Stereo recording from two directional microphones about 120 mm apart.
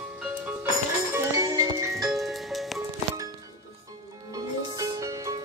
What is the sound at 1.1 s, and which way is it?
Music, 25° right (ahead or behind).